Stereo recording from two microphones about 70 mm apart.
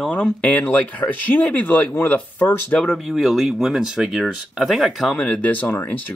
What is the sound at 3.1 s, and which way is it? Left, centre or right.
Speech, centre.